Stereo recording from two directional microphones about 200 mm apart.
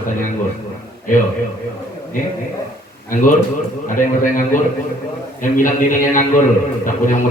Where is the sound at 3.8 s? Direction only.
40° left (ahead or behind).